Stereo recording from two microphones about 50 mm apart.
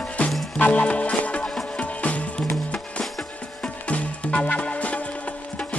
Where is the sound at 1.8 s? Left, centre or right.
Left.